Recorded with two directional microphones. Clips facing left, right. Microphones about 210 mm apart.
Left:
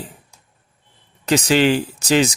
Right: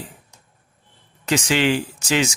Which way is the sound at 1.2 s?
35° left (ahead or behind).